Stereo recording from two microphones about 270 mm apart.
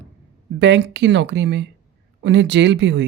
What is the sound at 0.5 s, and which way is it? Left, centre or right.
Speech, right.